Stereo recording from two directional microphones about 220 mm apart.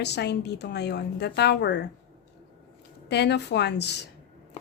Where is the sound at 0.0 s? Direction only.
50° left (ahead or behind).